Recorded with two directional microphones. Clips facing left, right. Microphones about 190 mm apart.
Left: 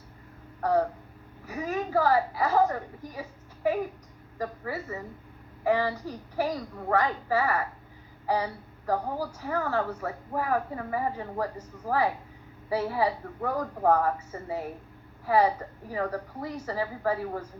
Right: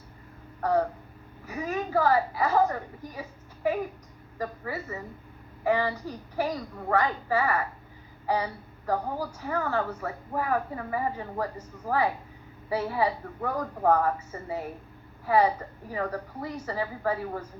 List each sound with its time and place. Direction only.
0.6 s a woman's voice: 30° left (ahead or behind)
8.9 s a woman's voice: 30° left (ahead or behind)
15.3 s a woman's voice: 35° left (ahead or behind)